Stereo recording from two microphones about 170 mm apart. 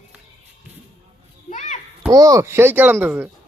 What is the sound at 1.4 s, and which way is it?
Children playing, 45° left (ahead or behind).